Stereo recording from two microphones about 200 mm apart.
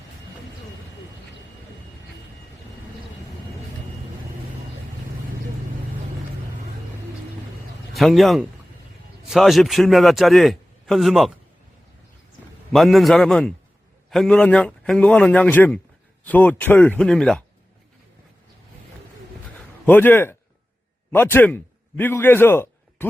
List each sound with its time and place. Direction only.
7.9 s a man's voice: centre (ahead or behind)
12.7 s a man's voice: centre (ahead or behind)
19.8 s a man's voice: 10° left (ahead or behind)